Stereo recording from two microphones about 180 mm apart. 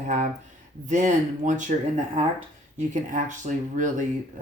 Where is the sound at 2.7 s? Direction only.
45° right (ahead or behind).